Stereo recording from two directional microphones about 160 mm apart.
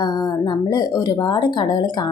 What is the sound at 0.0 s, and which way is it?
Speech, 25° left (ahead or behind).